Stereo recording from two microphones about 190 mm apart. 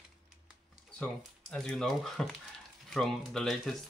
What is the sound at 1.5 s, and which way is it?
Speech, 5° left (ahead or behind).